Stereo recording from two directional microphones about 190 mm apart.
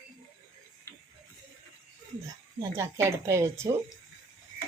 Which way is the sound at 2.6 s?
15° right (ahead or behind).